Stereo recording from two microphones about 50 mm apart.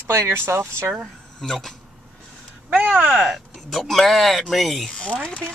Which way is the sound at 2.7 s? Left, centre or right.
Right.